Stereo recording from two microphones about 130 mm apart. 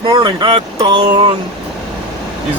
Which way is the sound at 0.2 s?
35° right (ahead or behind).